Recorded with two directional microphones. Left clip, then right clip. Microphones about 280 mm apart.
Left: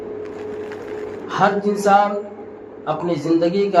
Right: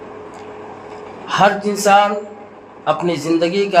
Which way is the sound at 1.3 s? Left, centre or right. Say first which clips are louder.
Right 3 dB; right.